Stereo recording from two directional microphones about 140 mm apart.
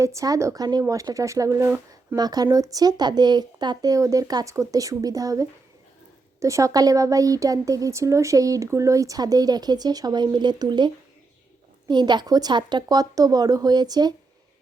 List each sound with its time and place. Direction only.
0.0 s speech: 20° right (ahead or behind)
2.1 s speech: 30° right (ahead or behind)